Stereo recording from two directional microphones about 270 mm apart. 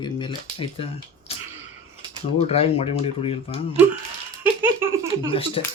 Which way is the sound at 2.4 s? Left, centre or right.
Left.